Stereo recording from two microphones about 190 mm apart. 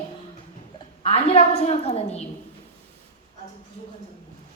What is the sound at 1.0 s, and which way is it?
A woman's voice, 30° left (ahead or behind).